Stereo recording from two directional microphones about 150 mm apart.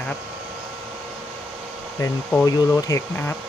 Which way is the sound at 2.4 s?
25° left (ahead or behind).